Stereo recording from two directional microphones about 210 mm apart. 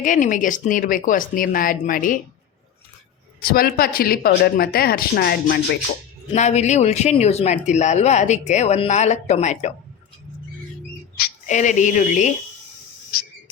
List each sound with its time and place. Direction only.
0.0 s speech: 40° left (ahead or behind)
3.5 s speech: 45° left (ahead or behind)
6.3 s speech: 35° left (ahead or behind)
11.2 s speech: 35° left (ahead or behind)